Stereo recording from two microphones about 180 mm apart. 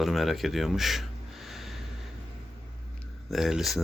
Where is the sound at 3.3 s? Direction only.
Centre (ahead or behind).